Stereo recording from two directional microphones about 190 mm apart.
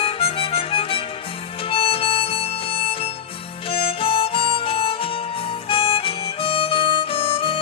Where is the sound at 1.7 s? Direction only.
30° left (ahead or behind).